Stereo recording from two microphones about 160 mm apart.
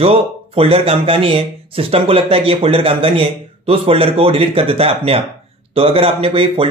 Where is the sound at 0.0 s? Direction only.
35° right (ahead or behind).